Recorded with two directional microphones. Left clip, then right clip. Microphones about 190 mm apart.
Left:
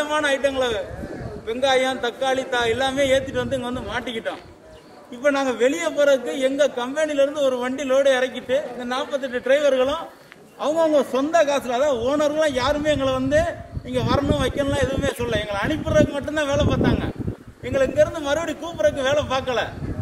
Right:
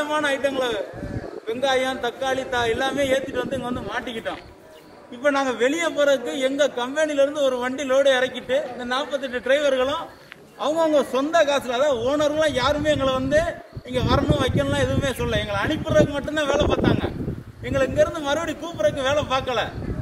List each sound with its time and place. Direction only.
0.0 s a man's voice: 10° left (ahead or behind)